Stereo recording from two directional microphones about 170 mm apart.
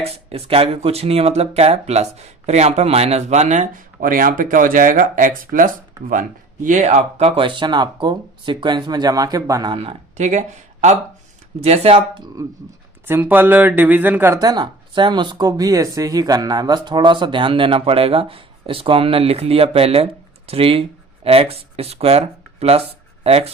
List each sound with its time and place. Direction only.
0.0 s speech: 35° right (ahead or behind)
9.7 s speech: 40° right (ahead or behind)
13.1 s speech: 10° right (ahead or behind)
14.4 s speech: 25° right (ahead or behind)
23.2 s speech: 35° right (ahead or behind)